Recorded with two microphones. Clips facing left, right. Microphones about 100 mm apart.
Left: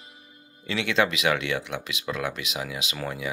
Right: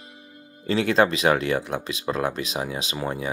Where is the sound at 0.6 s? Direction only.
40° right (ahead or behind).